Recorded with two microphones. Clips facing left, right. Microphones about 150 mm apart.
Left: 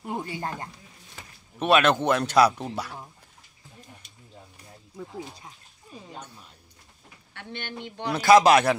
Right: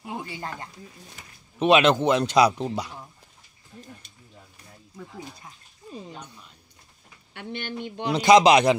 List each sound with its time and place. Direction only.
0.0 s speech: 45° left (ahead or behind)
1.6 s a man's voice: 15° right (ahead or behind)
7.3 s a man's voice: 15° right (ahead or behind)